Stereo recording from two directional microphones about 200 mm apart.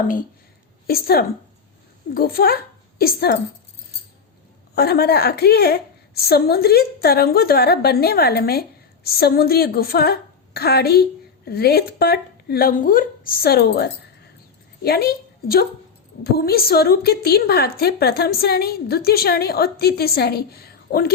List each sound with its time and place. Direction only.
0.9 s a woman's voice: 50° left (ahead or behind)
4.7 s a woman's voice: 55° left (ahead or behind)